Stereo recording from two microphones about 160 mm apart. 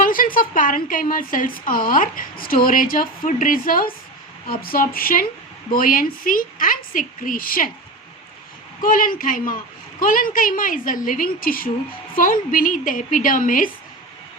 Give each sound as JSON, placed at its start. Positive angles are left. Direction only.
{"t": 0.0, "sound": "a woman's voice", "side_deg": 60}
{"t": 8.8, "sound": "a woman's voice", "side_deg": 60}